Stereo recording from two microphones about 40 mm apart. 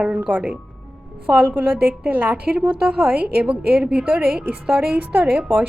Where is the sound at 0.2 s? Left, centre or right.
Right.